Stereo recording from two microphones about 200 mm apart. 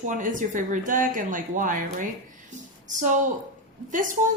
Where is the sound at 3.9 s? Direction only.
40° right (ahead or behind).